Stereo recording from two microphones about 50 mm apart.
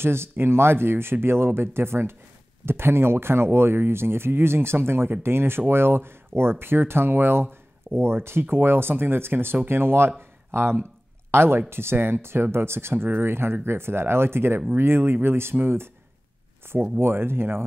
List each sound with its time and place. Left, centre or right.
0.0 s speech: right
17.0 s speech: right